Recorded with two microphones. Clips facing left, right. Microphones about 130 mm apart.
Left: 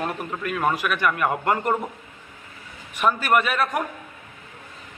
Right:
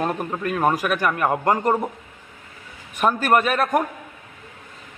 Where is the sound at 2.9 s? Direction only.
40° right (ahead or behind).